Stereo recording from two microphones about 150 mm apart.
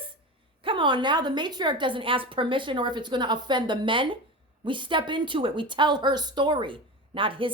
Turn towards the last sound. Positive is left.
turn(degrees=-35)  # may be behind; listen again after turning